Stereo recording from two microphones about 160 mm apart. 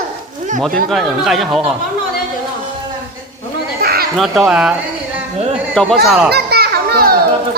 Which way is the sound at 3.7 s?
70° right (ahead or behind).